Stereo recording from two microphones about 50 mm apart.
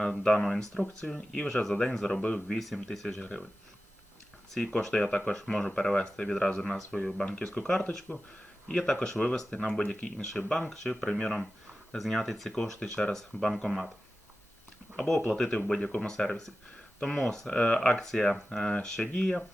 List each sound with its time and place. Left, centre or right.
0.0 s speech: centre
4.6 s speech: centre
8.1 s speech: left
8.6 s speech: centre
10.7 s speech: centre
13.7 s speech: centre
14.9 s speech: centre